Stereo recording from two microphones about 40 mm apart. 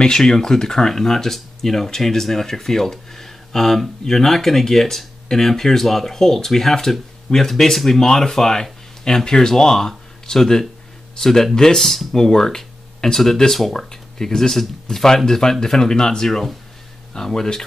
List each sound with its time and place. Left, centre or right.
0.0 s speech: centre
16.3 s speech: centre